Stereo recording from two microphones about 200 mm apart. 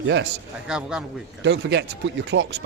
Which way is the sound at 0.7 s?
5° right (ahead or behind).